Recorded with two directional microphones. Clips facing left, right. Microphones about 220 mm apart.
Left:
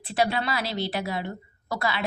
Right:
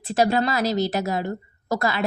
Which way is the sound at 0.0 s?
45° right (ahead or behind).